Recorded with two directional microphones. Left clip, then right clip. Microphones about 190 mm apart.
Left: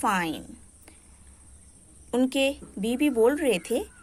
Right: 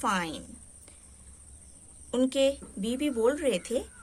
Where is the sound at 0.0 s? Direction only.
25° left (ahead or behind).